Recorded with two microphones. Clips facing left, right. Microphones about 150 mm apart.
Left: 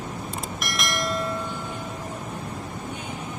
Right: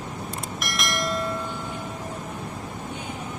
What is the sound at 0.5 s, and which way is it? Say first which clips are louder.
Bell: right 1 dB; centre (ahead or behind).